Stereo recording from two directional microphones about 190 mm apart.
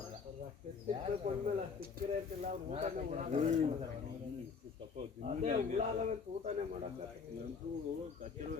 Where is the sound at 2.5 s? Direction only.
35° right (ahead or behind).